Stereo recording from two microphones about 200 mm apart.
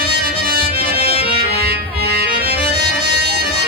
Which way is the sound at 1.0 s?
30° left (ahead or behind).